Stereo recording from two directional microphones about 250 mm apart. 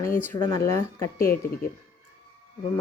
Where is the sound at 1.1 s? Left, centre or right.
Left.